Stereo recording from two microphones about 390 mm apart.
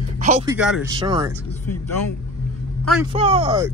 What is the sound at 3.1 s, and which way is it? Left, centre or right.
Speech, centre.